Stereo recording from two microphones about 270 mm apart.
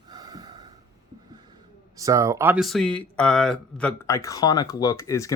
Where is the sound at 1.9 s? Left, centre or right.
Centre.